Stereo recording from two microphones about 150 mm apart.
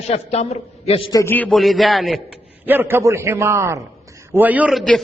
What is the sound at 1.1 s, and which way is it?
Speech, 15° left (ahead or behind).